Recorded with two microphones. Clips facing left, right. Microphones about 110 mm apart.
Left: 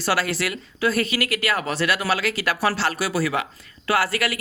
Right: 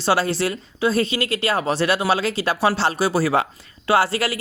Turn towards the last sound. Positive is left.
turn(degrees=-30)  # may be behind; listen again after turning